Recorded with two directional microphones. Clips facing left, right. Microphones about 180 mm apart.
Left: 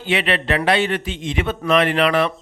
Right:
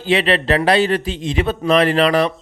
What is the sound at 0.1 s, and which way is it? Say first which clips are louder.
Speech: right 4 dB; 35° right (ahead or behind).